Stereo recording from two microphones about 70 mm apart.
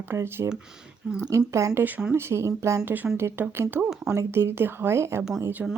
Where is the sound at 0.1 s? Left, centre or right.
Right.